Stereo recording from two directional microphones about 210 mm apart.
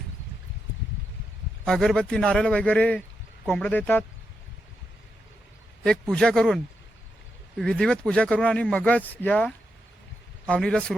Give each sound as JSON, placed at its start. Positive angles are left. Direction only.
{"t": 1.6, "sound": "a man's voice", "side_deg": 0}
{"t": 5.8, "sound": "a man's voice", "side_deg": 5}